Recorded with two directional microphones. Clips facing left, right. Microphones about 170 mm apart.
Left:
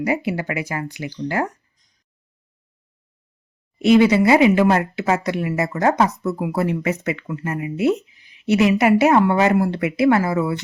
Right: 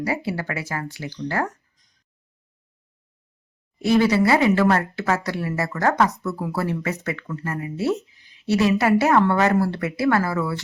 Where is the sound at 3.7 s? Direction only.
20° left (ahead or behind).